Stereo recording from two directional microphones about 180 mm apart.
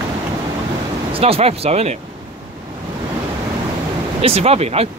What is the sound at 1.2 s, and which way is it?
Speech, 35° right (ahead or behind).